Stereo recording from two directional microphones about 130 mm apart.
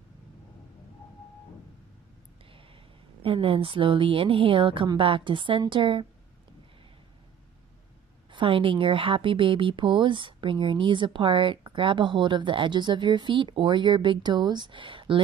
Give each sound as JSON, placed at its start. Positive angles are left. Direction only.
{"t": 3.2, "sound": "a woman's voice", "side_deg": -45}
{"t": 8.3, "sound": "a woman's voice", "side_deg": -40}